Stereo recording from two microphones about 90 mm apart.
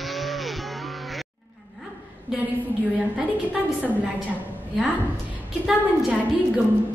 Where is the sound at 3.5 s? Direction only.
20° right (ahead or behind).